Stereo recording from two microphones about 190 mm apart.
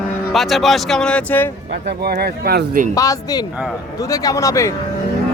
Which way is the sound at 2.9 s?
20° left (ahead or behind).